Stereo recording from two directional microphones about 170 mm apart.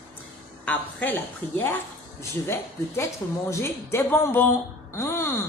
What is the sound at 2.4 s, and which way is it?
A woman's voice, 15° left (ahead or behind).